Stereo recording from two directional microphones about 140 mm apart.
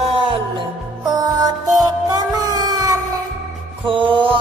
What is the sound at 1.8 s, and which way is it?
Music, 30° right (ahead or behind).